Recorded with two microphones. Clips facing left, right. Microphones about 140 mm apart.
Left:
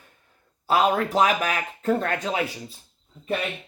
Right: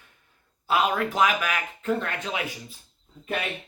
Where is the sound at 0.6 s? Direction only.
35° left (ahead or behind).